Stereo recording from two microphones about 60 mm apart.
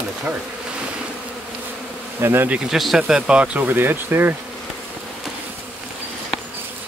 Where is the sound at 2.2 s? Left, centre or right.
Right.